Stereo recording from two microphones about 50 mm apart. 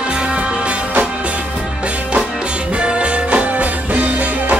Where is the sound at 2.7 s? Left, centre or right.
Right.